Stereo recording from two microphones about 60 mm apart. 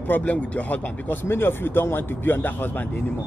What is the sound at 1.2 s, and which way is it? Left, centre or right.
Speech, left.